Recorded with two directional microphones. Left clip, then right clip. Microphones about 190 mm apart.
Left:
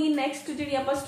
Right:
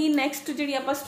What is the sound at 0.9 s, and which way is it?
Speech, 60° right (ahead or behind).